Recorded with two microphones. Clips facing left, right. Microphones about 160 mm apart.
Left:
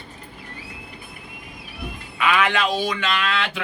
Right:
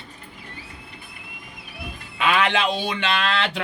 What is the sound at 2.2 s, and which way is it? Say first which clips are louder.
Speech: even; 30° right (ahead or behind).